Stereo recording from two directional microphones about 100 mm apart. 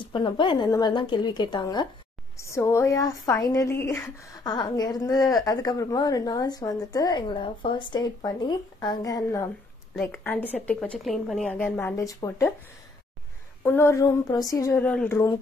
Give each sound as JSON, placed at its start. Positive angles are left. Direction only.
{"t": 0.0, "sound": "a woman's voice", "side_deg": 55}
{"t": 0.7, "sound": "a woman's voice", "side_deg": 45}
{"t": 2.3, "sound": "a woman's voice", "side_deg": 30}
{"t": 3.7, "sound": "a woman's voice", "side_deg": 20}
{"t": 4.3, "sound": "a woman's voice", "side_deg": 45}
{"t": 10.0, "sound": "a woman's voice", "side_deg": 20}
{"t": 11.4, "sound": "a woman's voice", "side_deg": 15}
{"t": 12.0, "sound": "a woman's voice", "side_deg": 35}
{"t": 13.7, "sound": "a woman's voice", "side_deg": 25}
{"t": 14.7, "sound": "a woman's voice", "side_deg": 15}